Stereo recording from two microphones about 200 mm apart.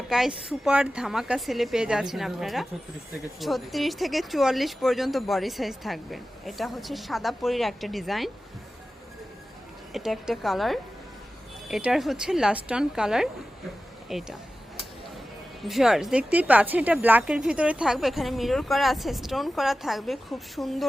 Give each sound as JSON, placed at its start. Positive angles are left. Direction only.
{"t": 0.1, "sound": "speech", "side_deg": 0}
{"t": 9.9, "sound": "speech", "side_deg": 0}
{"t": 15.6, "sound": "speech", "side_deg": 0}